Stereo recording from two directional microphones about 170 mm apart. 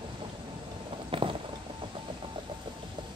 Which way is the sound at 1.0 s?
30° right (ahead or behind).